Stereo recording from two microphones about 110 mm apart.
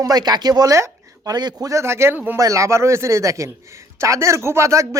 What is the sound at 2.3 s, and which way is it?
A woman's voice, 30° right (ahead or behind).